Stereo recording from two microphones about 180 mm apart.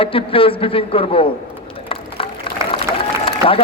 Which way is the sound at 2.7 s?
30° left (ahead or behind).